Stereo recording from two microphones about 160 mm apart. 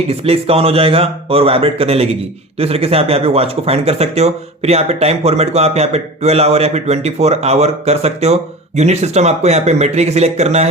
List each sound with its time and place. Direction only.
0.1 s speech: 35° right (ahead or behind)